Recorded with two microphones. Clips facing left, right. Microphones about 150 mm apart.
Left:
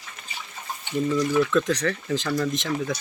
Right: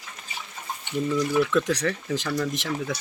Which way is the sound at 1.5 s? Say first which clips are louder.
Left 1 dB; 10° right (ahead or behind).